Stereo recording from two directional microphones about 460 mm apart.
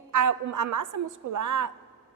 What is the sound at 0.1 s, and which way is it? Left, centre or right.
A woman's voice, right.